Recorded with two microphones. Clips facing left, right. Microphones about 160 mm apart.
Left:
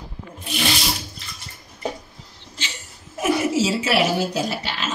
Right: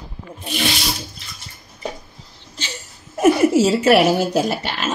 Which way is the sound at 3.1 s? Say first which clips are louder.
Right 7 dB; 50° right (ahead or behind).